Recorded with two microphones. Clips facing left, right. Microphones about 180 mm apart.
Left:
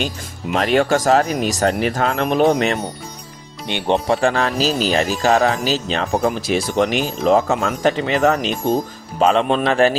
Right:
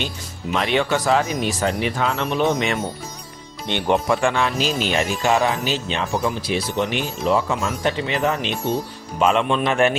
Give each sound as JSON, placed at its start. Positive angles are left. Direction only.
{"t": 0.5, "sound": "speech", "side_deg": 45}
{"t": 4.0, "sound": "speech", "side_deg": 35}
{"t": 6.7, "sound": "speech", "side_deg": 85}
{"t": 7.3, "sound": "speech", "side_deg": 45}